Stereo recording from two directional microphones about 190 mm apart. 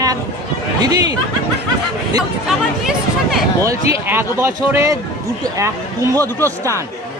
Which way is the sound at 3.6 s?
15° right (ahead or behind).